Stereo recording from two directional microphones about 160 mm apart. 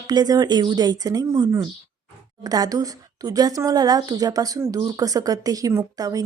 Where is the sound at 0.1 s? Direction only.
25° right (ahead or behind).